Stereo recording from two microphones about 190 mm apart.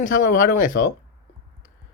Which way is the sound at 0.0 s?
45° left (ahead or behind).